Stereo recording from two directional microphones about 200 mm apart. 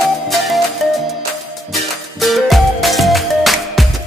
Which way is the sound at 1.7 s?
Centre (ahead or behind).